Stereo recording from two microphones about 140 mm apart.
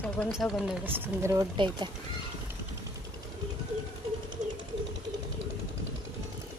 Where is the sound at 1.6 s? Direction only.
35° right (ahead or behind).